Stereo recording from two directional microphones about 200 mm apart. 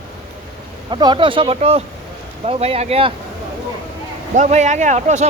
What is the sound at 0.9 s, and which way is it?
Speech, 25° right (ahead or behind).